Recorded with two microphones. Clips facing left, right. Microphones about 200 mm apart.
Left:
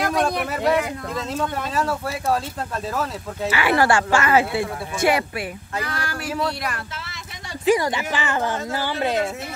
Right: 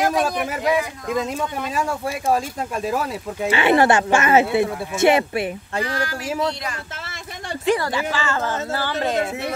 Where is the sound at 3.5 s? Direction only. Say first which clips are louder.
Right 3 dB; 25° right (ahead or behind).